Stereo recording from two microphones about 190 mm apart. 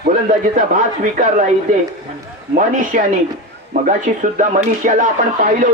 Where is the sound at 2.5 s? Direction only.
45° right (ahead or behind).